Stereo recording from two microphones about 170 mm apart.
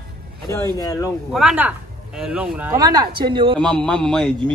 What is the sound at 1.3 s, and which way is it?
A man's voice, 5° right (ahead or behind).